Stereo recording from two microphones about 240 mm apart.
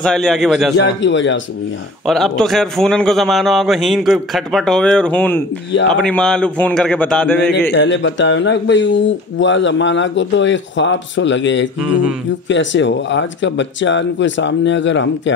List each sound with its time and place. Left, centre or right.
0.0 s a man's voice: centre
0.7 s speech: left
2.0 s a man's voice: centre
7.7 s speech: left